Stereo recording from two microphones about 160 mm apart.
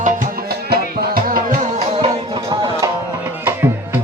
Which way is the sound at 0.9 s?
65° right (ahead or behind).